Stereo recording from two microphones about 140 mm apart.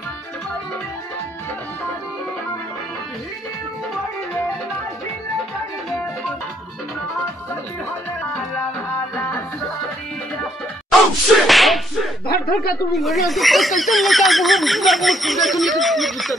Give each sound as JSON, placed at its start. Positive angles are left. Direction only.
{"t": 10.9, "sound": "whip", "side_deg": 0}
{"t": 12.3, "sound": "speech", "side_deg": 90}
{"t": 12.9, "sound": "speech", "side_deg": 0}